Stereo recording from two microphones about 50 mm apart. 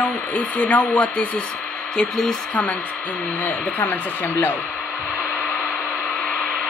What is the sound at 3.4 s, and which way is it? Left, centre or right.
Speech, left.